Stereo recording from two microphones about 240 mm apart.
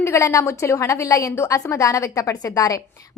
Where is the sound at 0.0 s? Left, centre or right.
Centre.